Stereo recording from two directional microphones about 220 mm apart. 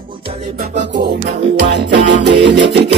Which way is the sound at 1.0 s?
45° right (ahead or behind).